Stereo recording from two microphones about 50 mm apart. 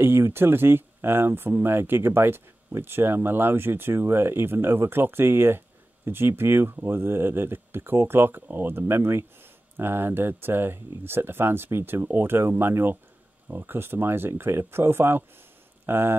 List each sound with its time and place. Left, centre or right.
0.0 s speech: right